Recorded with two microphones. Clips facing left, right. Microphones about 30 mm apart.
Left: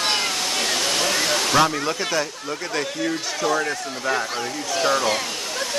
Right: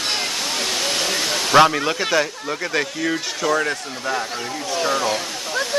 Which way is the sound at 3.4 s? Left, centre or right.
Right.